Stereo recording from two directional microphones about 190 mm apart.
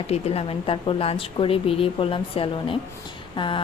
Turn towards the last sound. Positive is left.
turn(degrees=25)  # may be behind; listen again after turning